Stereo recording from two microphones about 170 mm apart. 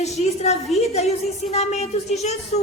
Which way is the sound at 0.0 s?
40° left (ahead or behind).